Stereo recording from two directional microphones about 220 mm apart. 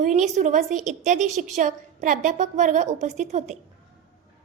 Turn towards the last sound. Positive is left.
turn(degrees=-30)  # may be behind; listen again after turning